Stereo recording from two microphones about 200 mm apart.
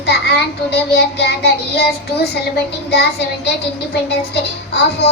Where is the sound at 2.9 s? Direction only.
55° left (ahead or behind).